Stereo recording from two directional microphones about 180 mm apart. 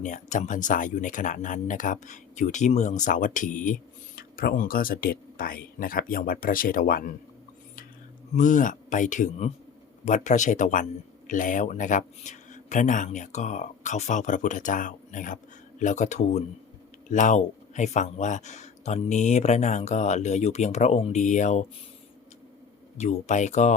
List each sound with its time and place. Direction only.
0.0 s speech: 45° left (ahead or behind)
8.4 s speech: 45° left (ahead or behind)
23.0 s speech: 40° left (ahead or behind)